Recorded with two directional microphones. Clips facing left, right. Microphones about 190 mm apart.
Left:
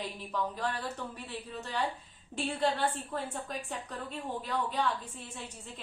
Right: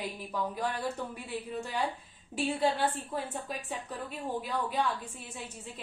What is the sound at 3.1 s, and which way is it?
A woman's voice, 10° right (ahead or behind).